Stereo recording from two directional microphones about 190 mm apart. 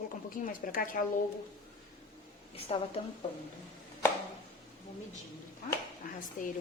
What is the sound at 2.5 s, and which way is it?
Speech, 30° left (ahead or behind).